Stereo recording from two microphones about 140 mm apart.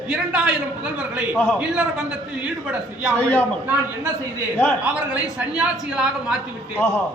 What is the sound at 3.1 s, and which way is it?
Speech, 15° left (ahead or behind).